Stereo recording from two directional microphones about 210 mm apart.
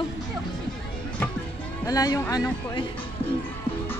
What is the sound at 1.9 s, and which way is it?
Speech, 15° left (ahead or behind).